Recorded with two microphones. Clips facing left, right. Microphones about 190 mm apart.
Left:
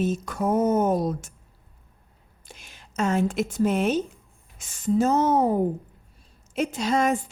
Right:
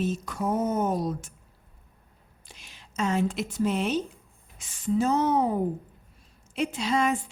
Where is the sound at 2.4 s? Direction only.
50° left (ahead or behind).